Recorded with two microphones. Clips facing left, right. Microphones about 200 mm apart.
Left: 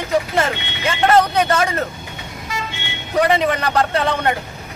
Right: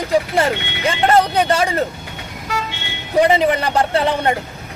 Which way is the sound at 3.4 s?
30° right (ahead or behind).